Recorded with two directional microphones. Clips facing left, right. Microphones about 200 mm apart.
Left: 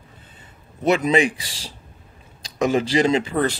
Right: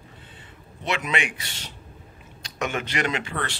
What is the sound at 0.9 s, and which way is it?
A man's voice, 35° left (ahead or behind).